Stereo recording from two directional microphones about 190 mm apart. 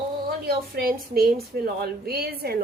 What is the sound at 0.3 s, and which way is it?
A woman's voice, 50° right (ahead or behind).